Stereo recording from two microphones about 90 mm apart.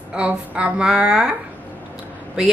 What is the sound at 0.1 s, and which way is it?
Speech, 10° right (ahead or behind).